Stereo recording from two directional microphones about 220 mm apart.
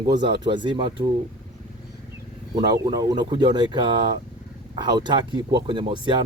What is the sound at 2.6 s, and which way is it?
Speech, 15° right (ahead or behind).